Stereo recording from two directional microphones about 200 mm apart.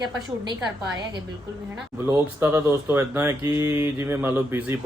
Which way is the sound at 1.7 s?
10° right (ahead or behind).